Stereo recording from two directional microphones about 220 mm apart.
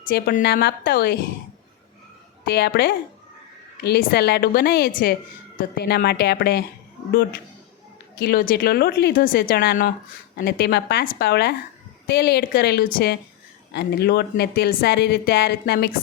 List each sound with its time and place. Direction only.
0.0 s a woman's voice: 40° left (ahead or behind)
2.4 s a woman's voice: 45° left (ahead or behind)